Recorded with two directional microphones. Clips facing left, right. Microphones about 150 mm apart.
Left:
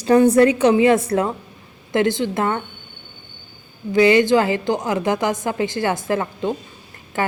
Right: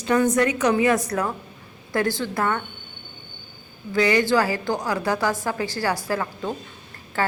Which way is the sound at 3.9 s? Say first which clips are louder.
Left 5 dB; 20° left (ahead or behind).